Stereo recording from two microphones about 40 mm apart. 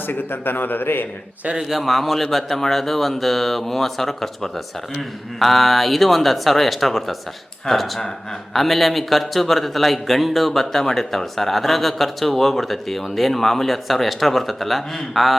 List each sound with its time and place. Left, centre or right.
0.1 s a man's voice: left
1.5 s a man's voice: centre